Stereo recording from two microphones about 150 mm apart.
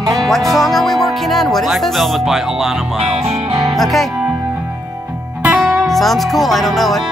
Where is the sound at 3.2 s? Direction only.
40° right (ahead or behind).